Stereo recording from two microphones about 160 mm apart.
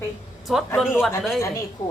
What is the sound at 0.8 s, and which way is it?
Speech, centre (ahead or behind).